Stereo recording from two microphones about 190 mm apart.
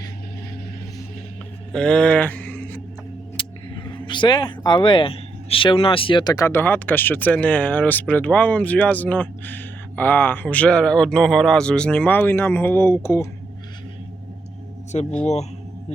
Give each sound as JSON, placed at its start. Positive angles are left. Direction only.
{"t": 1.7, "sound": "speech", "side_deg": 5}
{"t": 3.3, "sound": "speech", "side_deg": 25}
{"t": 15.2, "sound": "speech", "side_deg": 35}